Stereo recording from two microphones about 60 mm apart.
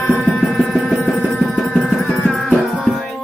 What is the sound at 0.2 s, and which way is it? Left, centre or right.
Music, centre.